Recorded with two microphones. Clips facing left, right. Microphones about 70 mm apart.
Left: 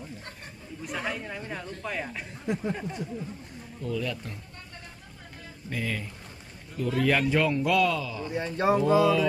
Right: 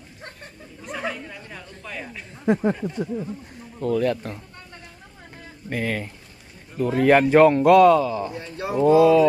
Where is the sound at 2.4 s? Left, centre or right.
Right.